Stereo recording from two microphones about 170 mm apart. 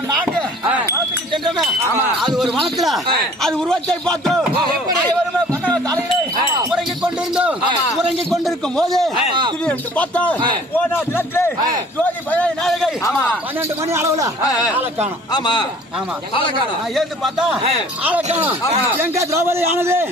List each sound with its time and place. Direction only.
2.2 s a man's voice: centre (ahead or behind)
6.7 s a sound: 5° right (ahead or behind)
8.0 s a man's voice: centre (ahead or behind)
13.6 s a man's voice: 15° right (ahead or behind)
15.3 s a man's voice: 25° left (ahead or behind)
16.9 s a man's voice: centre (ahead or behind)
18.2 s speech: 40° right (ahead or behind)
19.0 s a man's voice: 15° right (ahead or behind)